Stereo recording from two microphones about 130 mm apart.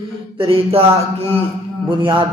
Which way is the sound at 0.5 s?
50° right (ahead or behind).